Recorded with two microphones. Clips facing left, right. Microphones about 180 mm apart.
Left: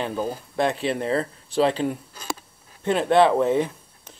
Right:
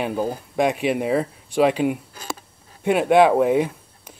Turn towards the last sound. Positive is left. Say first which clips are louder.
# right 2 dB
turn(degrees=-10)  # may be behind; listen again after turning